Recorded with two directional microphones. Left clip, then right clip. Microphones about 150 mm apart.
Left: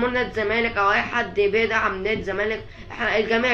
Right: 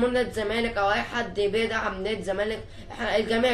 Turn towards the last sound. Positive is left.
turn(degrees=-30)  # may be behind; listen again after turning